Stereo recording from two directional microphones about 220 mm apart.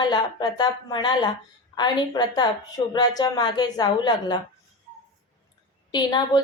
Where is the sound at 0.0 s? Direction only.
20° left (ahead or behind).